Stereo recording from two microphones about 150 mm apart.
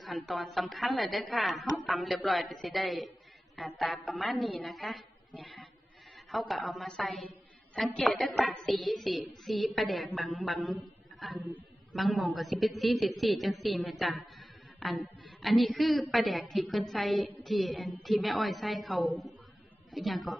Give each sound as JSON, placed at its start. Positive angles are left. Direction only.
{"t": 0.0, "sound": "a man's voice", "side_deg": 0}